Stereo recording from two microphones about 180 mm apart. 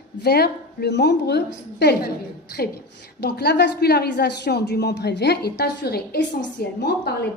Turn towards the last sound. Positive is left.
turn(degrees=65)  # may be behind; listen again after turning